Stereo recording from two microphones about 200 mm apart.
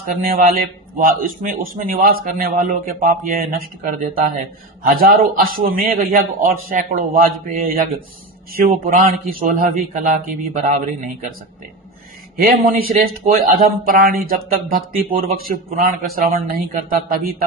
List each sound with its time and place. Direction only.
0.0 s a man's voice: 45° right (ahead or behind)
12.4 s a man's voice: 50° right (ahead or behind)